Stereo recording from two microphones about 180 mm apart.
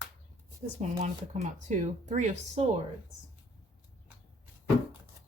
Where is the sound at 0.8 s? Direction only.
40° right (ahead or behind).